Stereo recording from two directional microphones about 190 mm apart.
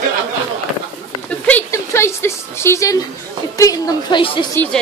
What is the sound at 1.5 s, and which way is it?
A woman's voice, 10° left (ahead or behind).